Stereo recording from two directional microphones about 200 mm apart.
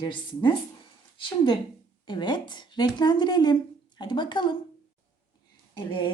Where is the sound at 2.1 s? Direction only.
25° left (ahead or behind).